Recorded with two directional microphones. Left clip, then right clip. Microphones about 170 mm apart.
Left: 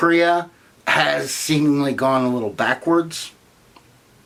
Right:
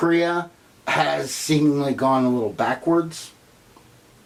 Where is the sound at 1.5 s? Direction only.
25° left (ahead or behind).